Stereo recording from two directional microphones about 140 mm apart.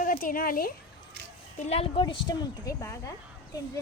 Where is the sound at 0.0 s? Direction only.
80° left.